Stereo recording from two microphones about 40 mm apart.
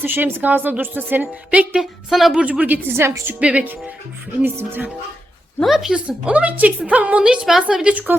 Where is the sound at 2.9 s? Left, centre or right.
Right.